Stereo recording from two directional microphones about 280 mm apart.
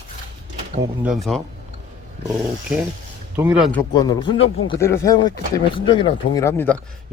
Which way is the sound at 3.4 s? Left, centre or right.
Centre.